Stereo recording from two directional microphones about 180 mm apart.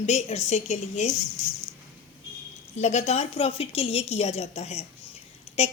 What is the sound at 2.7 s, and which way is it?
A woman's voice, 40° left (ahead or behind).